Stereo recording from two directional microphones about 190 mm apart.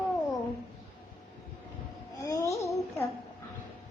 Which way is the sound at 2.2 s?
15° left (ahead or behind).